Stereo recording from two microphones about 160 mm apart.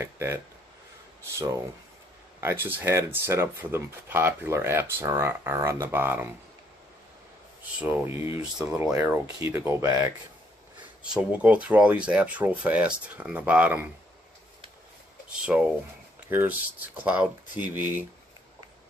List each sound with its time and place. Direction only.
0.0 s speech: 15° right (ahead or behind)
7.8 s speech: 15° right (ahead or behind)
11.3 s speech: 10° right (ahead or behind)
15.4 s speech: 5° right (ahead or behind)